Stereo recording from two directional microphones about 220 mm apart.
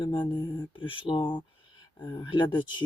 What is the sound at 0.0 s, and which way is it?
Speech, 20° left (ahead or behind).